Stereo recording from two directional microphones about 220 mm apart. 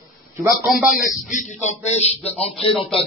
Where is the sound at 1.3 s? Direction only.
35° left (ahead or behind).